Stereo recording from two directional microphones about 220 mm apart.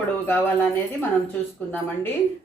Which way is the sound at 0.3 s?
10° left (ahead or behind).